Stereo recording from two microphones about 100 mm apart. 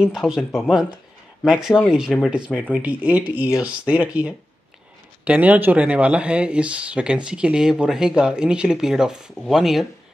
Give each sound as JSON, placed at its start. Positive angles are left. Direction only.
{"t": 0.0, "sound": "speech", "side_deg": -5}